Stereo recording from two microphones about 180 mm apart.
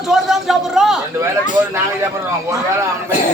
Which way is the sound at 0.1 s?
Centre (ahead or behind).